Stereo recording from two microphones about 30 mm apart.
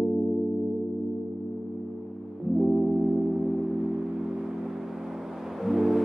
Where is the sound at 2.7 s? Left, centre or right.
Centre.